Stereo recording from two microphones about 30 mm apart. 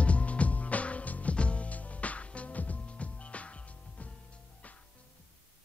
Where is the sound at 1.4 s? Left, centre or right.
Left.